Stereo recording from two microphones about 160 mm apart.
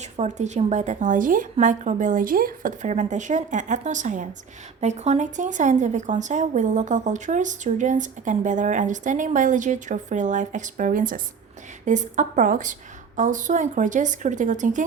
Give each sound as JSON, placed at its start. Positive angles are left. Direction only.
{"t": 0.0, "sound": "speech", "side_deg": -45}